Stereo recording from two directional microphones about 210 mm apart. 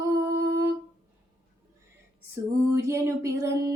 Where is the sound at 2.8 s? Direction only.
15° right (ahead or behind).